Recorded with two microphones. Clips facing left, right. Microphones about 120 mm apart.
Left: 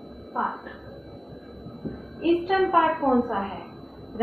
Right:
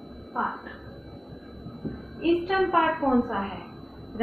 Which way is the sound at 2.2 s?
10° left (ahead or behind).